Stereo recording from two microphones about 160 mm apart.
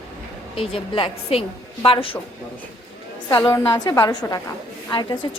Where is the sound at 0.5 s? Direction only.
35° left (ahead or behind).